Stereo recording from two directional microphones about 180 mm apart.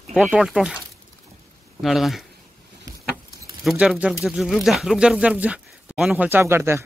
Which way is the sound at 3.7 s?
5° right (ahead or behind).